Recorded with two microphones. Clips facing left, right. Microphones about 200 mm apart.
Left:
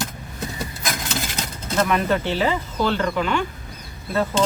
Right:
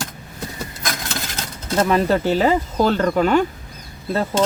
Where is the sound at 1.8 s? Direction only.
35° right (ahead or behind).